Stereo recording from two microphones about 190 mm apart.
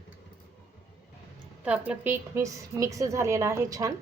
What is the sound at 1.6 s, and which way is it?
A woman's voice, 5° right (ahead or behind).